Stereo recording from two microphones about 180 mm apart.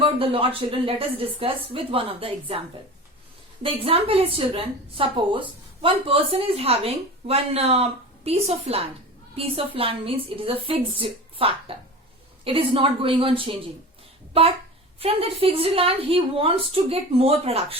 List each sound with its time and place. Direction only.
0.0 s a woman's voice: 30° right (ahead or behind)
14.9 s a woman's voice: 30° right (ahead or behind)